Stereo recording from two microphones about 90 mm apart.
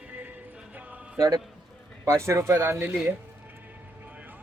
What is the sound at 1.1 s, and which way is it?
Speech, 40° right (ahead or behind).